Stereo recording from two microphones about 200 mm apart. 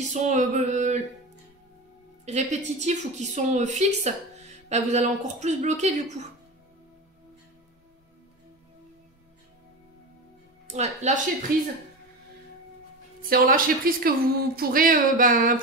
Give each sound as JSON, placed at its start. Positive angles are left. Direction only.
{"t": 0.1, "sound": "a woman's voice", "side_deg": -35}
{"t": 2.2, "sound": "a woman's voice", "side_deg": -35}
{"t": 10.7, "sound": "a woman's voice", "side_deg": -35}
{"t": 13.3, "sound": "speech", "side_deg": -45}